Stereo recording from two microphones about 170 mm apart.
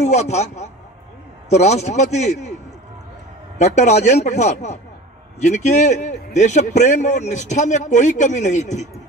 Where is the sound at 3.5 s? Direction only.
40° left (ahead or behind).